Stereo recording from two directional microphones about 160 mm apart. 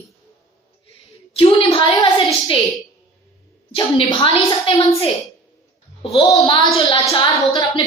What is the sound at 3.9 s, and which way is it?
Speech, 35° left (ahead or behind).